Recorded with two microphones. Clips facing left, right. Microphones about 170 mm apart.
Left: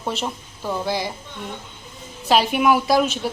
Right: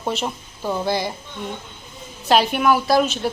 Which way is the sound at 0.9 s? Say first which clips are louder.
Right 3 dB; centre (ahead or behind).